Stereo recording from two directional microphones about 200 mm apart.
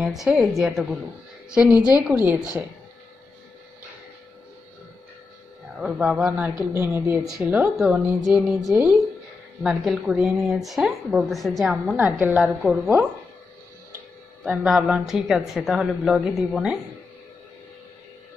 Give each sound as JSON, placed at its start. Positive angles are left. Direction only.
{"t": 0.0, "sound": "a woman's voice", "side_deg": 0}
{"t": 5.8, "sound": "a woman's voice", "side_deg": -5}
{"t": 14.4, "sound": "speech", "side_deg": -5}